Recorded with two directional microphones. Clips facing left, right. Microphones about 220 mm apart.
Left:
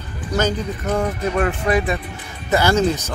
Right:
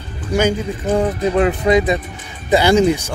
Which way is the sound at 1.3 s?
20° right (ahead or behind).